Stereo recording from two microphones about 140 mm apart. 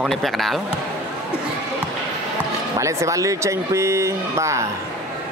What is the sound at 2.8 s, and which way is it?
Speech, 20° right (ahead or behind).